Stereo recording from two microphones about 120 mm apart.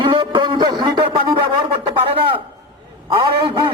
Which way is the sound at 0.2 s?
45° right (ahead or behind).